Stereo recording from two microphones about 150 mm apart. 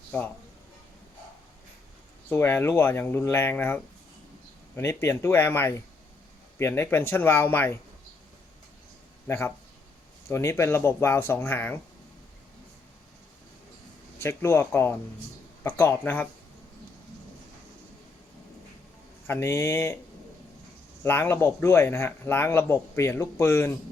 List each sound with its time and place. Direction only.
2.3 s speech: 15° left (ahead or behind)
9.2 s speech: 15° left (ahead or behind)
14.2 s speech: 15° left (ahead or behind)
19.3 s speech: 15° left (ahead or behind)
21.0 s speech: 15° left (ahead or behind)